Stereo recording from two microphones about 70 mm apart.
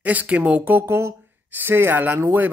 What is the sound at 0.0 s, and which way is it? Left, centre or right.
Speech, right.